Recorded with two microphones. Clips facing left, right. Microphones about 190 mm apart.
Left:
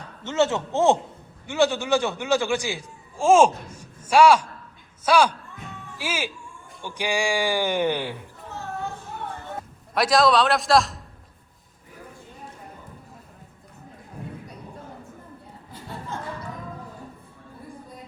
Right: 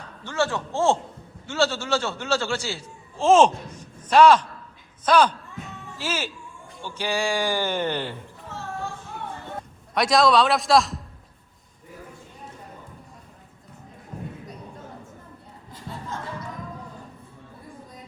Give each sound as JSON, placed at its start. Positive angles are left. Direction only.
{"t": 0.2, "sound": "a man's voice", "side_deg": 20}
{"t": 9.6, "sound": "a man's voice", "side_deg": 0}